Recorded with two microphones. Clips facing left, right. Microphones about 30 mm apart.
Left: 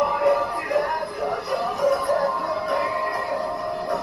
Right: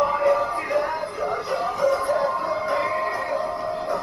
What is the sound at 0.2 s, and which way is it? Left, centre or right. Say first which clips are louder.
Music: even; left.